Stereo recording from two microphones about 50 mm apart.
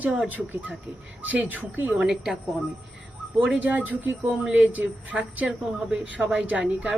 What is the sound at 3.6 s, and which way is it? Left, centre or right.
A woman's voice, right.